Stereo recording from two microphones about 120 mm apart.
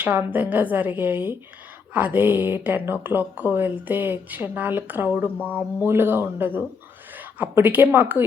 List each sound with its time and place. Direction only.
0.0 s a woman's voice: 15° right (ahead or behind)